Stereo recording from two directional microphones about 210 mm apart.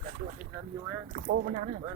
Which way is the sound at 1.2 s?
40° right (ahead or behind).